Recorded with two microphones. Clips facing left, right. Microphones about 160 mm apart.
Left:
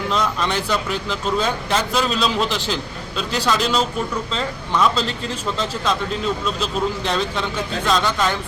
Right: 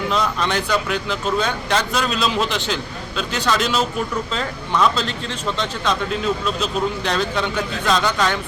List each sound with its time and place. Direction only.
0.1 s speech: centre (ahead or behind)